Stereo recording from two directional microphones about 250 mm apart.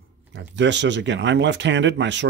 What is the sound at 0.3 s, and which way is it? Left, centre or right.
Speech, right.